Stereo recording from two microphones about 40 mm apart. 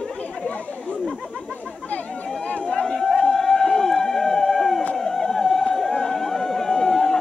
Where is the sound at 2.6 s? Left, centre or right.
Centre.